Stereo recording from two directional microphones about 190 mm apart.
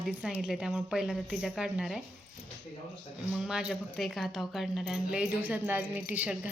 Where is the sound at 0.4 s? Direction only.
5° right (ahead or behind).